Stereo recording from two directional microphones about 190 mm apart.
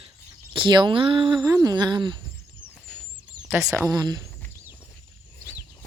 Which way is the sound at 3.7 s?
15° right (ahead or behind).